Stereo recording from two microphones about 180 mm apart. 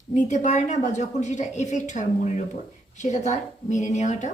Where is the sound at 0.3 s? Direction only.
40° left (ahead or behind).